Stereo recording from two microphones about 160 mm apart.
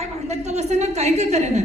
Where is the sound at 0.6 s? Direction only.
45° right (ahead or behind).